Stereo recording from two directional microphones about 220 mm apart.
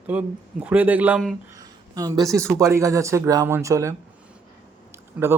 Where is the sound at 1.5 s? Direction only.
15° right (ahead or behind).